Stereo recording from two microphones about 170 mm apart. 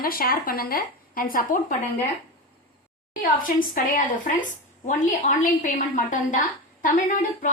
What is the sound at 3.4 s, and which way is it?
A woman's voice, 55° left (ahead or behind).